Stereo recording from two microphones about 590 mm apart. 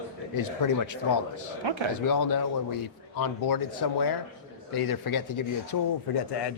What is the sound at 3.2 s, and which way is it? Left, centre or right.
Speech, left.